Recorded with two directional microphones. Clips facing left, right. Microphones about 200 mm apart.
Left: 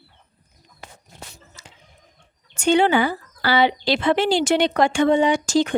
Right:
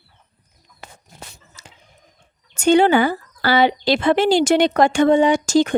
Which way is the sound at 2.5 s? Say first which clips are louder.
Right 3 dB; 40° right (ahead or behind).